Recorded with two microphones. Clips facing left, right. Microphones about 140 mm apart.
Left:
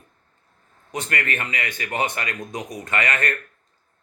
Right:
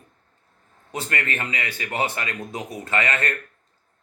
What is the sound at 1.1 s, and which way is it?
Speech, 30° right (ahead or behind).